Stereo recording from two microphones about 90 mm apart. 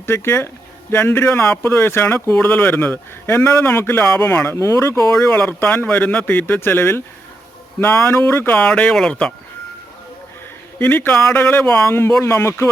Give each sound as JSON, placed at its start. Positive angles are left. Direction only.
{"t": 0.0, "sound": "speech", "side_deg": 30}
{"t": 5.4, "sound": "speech", "side_deg": 25}
{"t": 10.8, "sound": "speech", "side_deg": 20}